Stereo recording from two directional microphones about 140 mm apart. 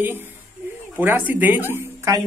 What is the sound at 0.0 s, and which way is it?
Speech, 15° right (ahead or behind).